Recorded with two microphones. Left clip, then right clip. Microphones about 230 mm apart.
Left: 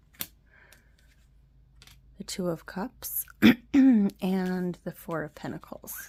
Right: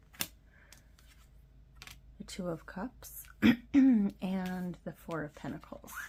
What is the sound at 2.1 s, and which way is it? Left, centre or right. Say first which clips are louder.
Speech: left 7 dB; left.